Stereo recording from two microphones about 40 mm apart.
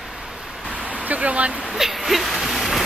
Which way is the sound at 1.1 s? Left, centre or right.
Right.